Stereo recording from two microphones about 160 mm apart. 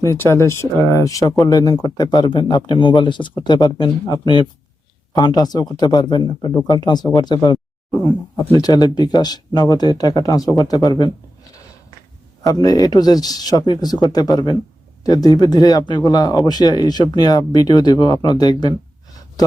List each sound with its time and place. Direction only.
0.0 s speech: 20° left (ahead or behind)
7.9 s speech: 15° left (ahead or behind)
12.4 s speech: 25° left (ahead or behind)